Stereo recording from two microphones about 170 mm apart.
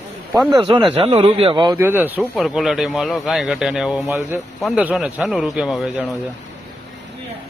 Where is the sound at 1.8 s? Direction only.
10° right (ahead or behind).